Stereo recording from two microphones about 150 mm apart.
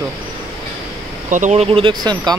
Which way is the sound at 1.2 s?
55° right (ahead or behind).